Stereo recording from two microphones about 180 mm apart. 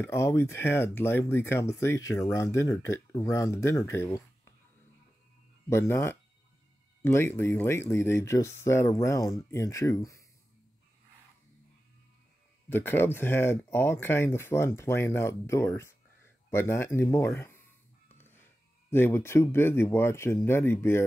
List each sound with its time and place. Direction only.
0.0 s speech: 15° left (ahead or behind)
5.7 s speech: 15° left (ahead or behind)
12.6 s speech: 10° left (ahead or behind)